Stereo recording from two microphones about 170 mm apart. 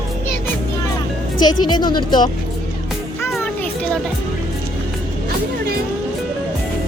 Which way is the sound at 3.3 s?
5° left (ahead or behind).